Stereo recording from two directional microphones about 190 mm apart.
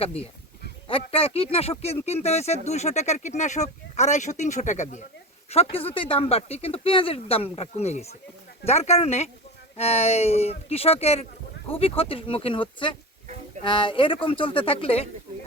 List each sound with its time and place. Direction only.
0.0 s speech: 30° left (ahead or behind)